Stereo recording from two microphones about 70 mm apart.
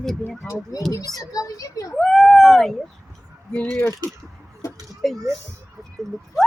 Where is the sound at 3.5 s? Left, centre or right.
Centre.